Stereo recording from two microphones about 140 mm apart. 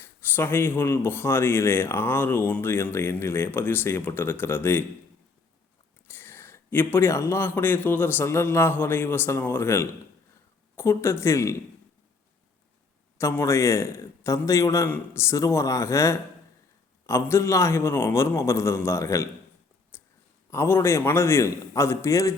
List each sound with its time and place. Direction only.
0.2 s speech: 15° left (ahead or behind)
6.1 s a man's voice: 15° left (ahead or behind)
13.1 s a man's voice: 20° left (ahead or behind)
19.9 s clicking: 15° left (ahead or behind)
20.5 s a man's voice: 20° left (ahead or behind)